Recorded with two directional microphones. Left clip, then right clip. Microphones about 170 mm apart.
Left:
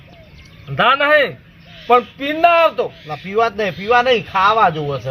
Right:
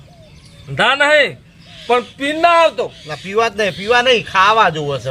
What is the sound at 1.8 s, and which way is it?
Speech, 60° right (ahead or behind).